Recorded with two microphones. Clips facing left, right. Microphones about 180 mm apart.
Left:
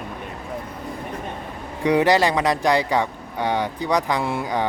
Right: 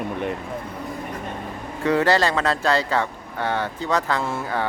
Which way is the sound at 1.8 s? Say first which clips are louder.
Left 2 dB; 15° left (ahead or behind).